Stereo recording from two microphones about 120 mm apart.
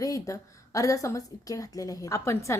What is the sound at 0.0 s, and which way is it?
A woman's voice, 25° left (ahead or behind).